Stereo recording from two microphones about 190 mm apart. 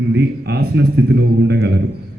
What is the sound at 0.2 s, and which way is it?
A man's voice, 60° right (ahead or behind).